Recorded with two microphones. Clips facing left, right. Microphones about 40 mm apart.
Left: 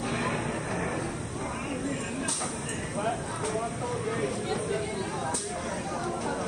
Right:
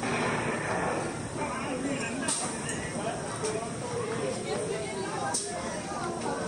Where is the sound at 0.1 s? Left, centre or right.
Right.